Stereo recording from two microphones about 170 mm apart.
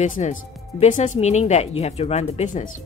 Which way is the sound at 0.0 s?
45° left (ahead or behind).